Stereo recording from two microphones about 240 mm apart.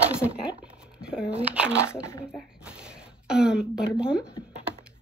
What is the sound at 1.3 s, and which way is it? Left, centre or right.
Speech, centre.